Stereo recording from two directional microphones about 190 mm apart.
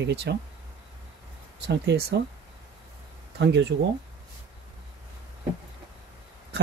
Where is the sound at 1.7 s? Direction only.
60° right (ahead or behind).